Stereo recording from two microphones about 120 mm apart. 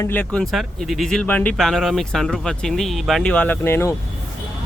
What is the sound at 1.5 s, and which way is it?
Speech, 5° left (ahead or behind).